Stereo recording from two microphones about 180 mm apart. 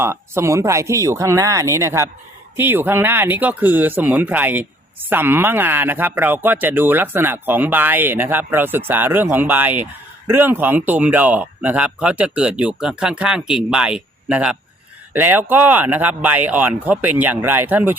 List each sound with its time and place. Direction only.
0.0 s speech: 15° right (ahead or behind)